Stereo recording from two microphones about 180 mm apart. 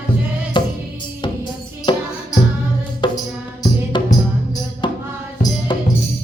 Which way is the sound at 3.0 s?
25° left (ahead or behind).